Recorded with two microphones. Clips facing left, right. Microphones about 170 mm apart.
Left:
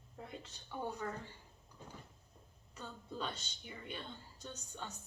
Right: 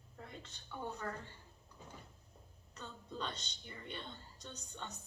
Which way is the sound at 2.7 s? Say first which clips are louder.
Left 1 dB; 10° left (ahead or behind).